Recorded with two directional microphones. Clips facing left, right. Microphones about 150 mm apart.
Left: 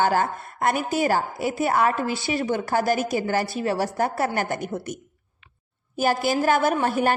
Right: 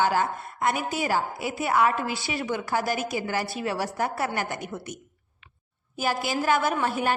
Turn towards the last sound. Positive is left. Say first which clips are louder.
# left 4 dB
turn(degrees=45)  # may be behind; listen again after turning